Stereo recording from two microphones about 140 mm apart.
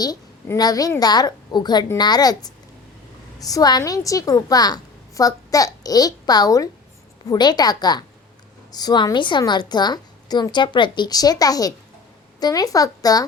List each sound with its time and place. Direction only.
0.4 s a woman's voice: 25° left (ahead or behind)